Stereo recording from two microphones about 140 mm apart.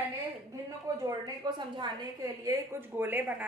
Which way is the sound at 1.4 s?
30° right (ahead or behind).